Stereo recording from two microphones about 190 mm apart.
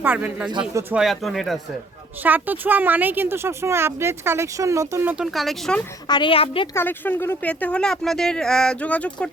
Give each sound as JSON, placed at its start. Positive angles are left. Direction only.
{"t": 0.0, "sound": "a woman's voice", "side_deg": -10}
{"t": 0.9, "sound": "speech", "side_deg": 0}
{"t": 2.2, "sound": "a woman's voice", "side_deg": -10}
{"t": 6.1, "sound": "speech", "side_deg": 25}
{"t": 6.7, "sound": "speech", "side_deg": 10}